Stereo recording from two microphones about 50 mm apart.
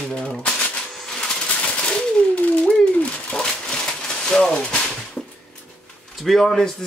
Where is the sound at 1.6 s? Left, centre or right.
Left.